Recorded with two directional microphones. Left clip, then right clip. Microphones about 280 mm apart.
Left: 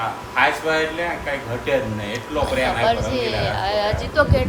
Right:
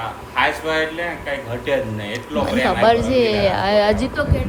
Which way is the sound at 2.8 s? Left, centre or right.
Right.